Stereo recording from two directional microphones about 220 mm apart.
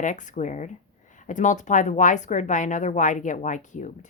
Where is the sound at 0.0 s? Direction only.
35° left (ahead or behind).